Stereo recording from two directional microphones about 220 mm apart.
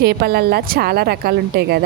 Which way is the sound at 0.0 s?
45° right (ahead or behind).